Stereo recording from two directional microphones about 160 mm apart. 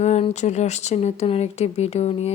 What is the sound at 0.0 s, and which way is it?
A woman's voice, 45° left (ahead or behind).